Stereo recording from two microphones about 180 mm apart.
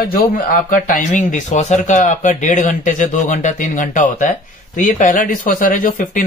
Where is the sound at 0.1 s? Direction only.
50° left (ahead or behind).